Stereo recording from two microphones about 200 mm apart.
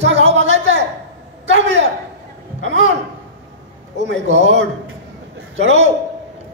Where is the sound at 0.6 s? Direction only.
65° right (ahead or behind).